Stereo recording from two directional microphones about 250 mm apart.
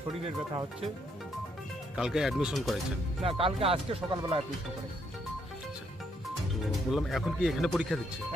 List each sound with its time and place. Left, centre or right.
2.0 s speech: centre
3.2 s speech: right
6.7 s speech: centre